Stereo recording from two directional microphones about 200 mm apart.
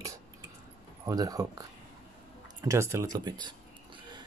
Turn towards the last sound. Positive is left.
turn(degrees=-20)  # may be behind; listen again after turning